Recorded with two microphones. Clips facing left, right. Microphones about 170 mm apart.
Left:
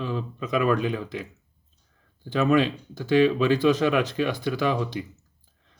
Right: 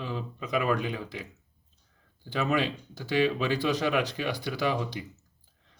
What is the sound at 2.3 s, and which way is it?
Speech, 50° left (ahead or behind).